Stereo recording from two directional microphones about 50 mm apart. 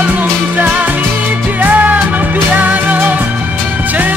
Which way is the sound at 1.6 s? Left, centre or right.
Right.